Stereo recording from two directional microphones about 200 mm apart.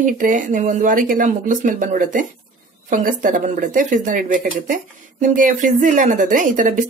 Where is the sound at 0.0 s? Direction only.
40° right (ahead or behind).